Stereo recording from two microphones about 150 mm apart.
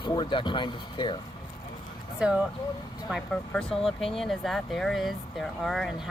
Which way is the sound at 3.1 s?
5° left (ahead or behind).